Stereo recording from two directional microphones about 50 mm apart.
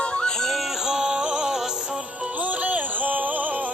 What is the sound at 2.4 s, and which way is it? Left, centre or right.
Music, right.